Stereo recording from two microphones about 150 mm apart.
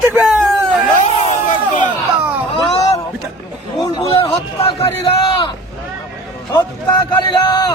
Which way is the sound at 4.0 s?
40° left (ahead or behind).